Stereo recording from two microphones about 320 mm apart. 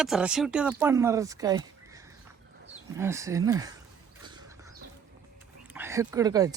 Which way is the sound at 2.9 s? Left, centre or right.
Centre.